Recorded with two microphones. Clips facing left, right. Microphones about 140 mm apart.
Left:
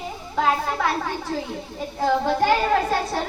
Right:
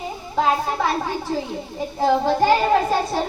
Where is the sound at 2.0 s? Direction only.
15° right (ahead or behind).